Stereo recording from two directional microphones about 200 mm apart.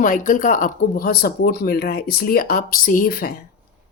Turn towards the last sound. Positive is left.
turn(degrees=45)  # may be behind; listen again after turning